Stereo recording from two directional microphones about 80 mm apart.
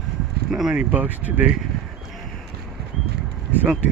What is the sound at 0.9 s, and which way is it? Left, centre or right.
Speech, centre.